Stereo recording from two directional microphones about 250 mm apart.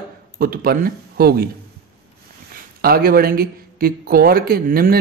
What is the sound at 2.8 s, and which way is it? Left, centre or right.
Speech, right.